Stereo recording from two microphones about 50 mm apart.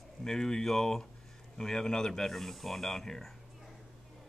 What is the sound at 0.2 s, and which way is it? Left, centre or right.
Speech, centre.